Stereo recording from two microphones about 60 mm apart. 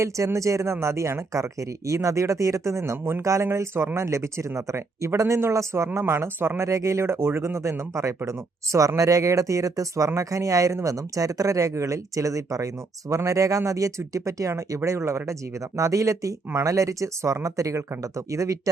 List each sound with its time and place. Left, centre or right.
0.3 s speech: right
6.6 s speech: right
14.8 s speech: right
15.8 s speech: right